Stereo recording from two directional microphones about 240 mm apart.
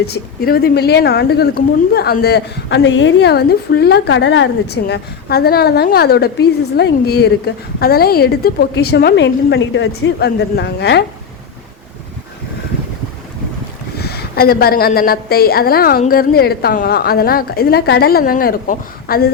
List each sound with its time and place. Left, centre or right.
0.0 s a woman's voice: left
14.0 s a woman's voice: left